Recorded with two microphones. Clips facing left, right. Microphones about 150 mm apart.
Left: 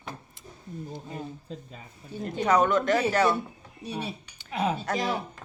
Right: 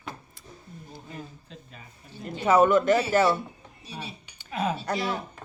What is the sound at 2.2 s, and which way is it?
Speech, 5° right (ahead or behind).